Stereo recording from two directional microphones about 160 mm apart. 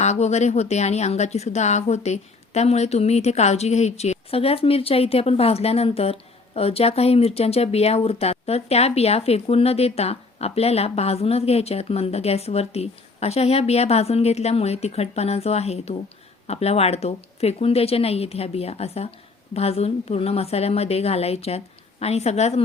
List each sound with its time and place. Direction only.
0.0 s a woman's voice: 45° left (ahead or behind)